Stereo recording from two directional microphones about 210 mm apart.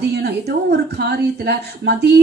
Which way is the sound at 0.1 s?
50° right (ahead or behind).